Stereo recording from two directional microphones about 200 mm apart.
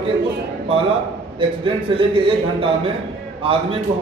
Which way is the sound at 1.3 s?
25° right (ahead or behind).